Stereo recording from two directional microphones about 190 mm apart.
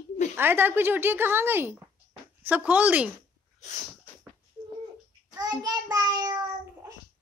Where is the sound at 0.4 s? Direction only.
10° right (ahead or behind).